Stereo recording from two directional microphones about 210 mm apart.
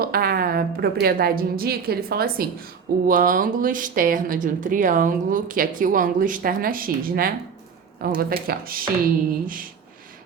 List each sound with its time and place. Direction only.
0.0 s a woman's voice: 45° right (ahead or behind)